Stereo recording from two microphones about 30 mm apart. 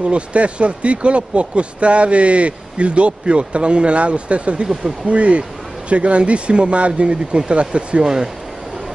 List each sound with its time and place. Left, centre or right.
0.0 s speech: right
8.0 s speech: right